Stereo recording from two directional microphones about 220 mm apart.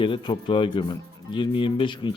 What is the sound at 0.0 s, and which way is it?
A man's voice, 20° left (ahead or behind).